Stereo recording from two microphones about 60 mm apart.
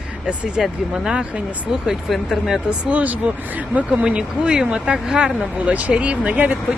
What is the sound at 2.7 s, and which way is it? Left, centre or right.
Speech, right.